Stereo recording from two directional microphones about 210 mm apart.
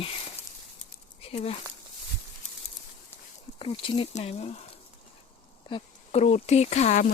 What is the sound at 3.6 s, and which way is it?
Speech, 25° left (ahead or behind).